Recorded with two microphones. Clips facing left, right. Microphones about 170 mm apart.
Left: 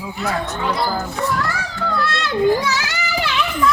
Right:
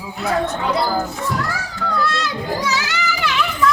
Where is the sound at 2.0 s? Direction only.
65° left (ahead or behind).